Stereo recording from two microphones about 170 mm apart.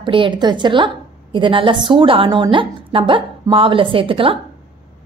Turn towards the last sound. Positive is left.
turn(degrees=-30)  # may be behind; listen again after turning